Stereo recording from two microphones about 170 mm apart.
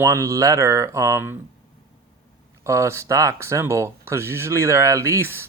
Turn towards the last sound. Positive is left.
turn(degrees=-15)  # may be behind; listen again after turning